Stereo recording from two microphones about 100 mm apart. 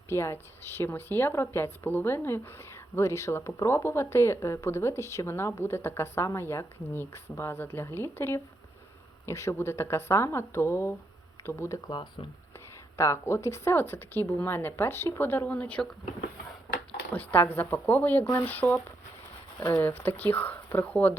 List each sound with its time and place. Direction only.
0.1 s speech: 25° left (ahead or behind)
11.8 s speech: 45° left (ahead or behind)
13.0 s speech: 25° left (ahead or behind)
17.1 s speech: 20° left (ahead or behind)